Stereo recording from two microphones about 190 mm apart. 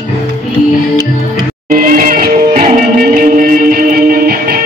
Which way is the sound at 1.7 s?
50° right (ahead or behind).